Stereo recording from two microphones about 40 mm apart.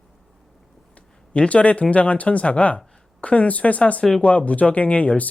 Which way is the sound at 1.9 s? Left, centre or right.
Left.